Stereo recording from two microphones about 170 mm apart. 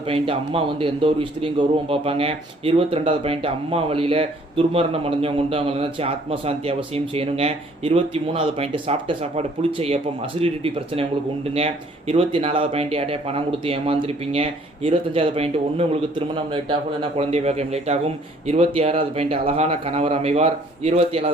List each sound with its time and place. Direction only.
0.1 s a man's voice: 30° right (ahead or behind)